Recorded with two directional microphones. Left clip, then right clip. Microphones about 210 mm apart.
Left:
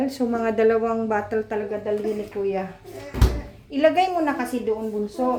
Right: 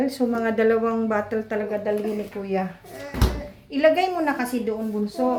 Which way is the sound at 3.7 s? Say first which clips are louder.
Even; 10° left (ahead or behind).